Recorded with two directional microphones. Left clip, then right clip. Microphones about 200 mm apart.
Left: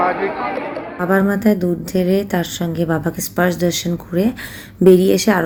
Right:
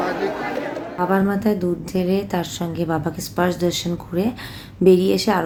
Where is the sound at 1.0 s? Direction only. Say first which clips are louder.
Left 5 dB; 15° left (ahead or behind).